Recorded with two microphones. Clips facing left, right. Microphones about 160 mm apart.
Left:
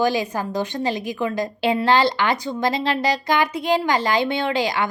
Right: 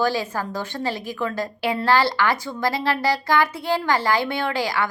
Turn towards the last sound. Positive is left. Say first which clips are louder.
# left 2 dB
turn(degrees=20)  # may be behind; listen again after turning